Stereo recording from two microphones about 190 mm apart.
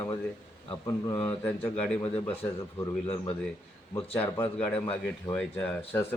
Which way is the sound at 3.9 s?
10° left (ahead or behind).